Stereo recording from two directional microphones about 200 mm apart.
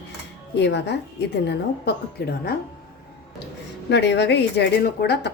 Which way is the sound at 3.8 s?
60° left (ahead or behind).